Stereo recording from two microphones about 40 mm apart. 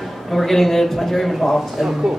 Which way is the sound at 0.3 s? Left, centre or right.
Centre.